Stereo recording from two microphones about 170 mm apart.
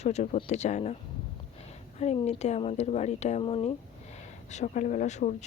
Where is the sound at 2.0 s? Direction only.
40° left (ahead or behind).